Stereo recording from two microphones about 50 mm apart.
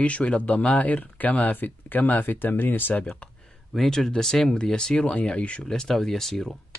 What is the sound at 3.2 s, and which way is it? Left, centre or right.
Speech, left.